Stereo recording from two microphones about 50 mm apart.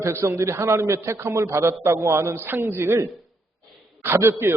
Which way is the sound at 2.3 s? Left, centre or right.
Right.